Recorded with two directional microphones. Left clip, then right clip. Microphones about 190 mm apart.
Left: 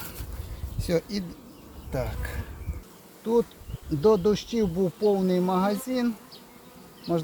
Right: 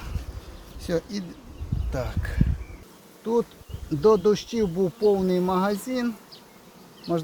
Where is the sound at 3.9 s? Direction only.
Centre (ahead or behind).